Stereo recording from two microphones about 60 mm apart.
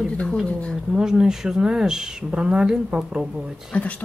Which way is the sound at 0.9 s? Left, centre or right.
Centre.